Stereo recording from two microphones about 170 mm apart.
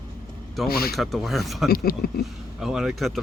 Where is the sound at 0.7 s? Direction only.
65° left (ahead or behind).